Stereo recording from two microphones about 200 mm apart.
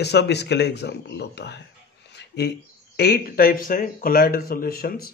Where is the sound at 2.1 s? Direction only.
55° left (ahead or behind).